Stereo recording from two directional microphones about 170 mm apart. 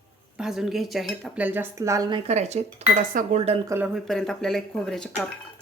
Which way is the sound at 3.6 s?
15° right (ahead or behind).